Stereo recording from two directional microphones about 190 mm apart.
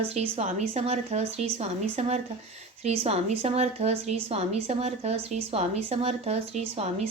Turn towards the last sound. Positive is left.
turn(degrees=-35)  # may be behind; listen again after turning